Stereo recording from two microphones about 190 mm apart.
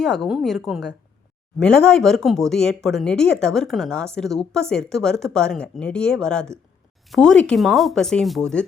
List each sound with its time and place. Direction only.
0.0 s speech: centre (ahead or behind)